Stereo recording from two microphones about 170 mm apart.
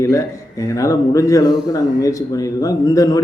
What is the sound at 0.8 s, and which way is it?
Speech, 20° left (ahead or behind).